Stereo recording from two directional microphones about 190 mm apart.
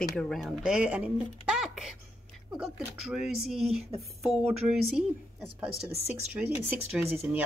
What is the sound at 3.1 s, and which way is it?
A woman's voice, centre (ahead or behind).